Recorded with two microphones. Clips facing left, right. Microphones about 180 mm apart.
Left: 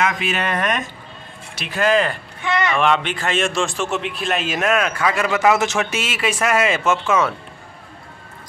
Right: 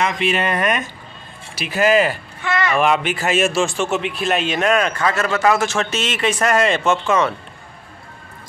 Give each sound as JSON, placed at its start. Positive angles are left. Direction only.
{"t": 0.0, "sound": "a man's voice", "side_deg": 0}
{"t": 2.4, "sound": "a sound", "side_deg": 15}
{"t": 2.7, "sound": "a man's voice", "side_deg": -5}